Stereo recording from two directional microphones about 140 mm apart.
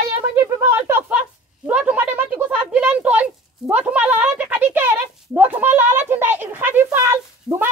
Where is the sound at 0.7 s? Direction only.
15° right (ahead or behind).